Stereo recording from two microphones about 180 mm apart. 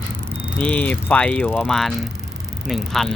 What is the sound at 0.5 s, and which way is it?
Speech, 5° left (ahead or behind).